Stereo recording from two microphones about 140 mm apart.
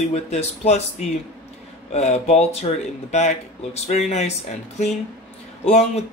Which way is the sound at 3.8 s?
55° left (ahead or behind).